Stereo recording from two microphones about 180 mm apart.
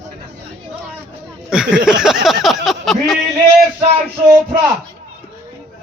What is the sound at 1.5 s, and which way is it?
Speech, 5° right (ahead or behind).